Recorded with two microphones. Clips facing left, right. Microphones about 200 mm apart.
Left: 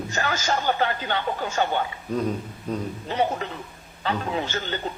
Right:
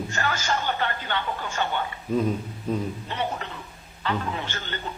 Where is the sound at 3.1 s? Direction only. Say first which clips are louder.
Left 5 dB; 40° left (ahead or behind).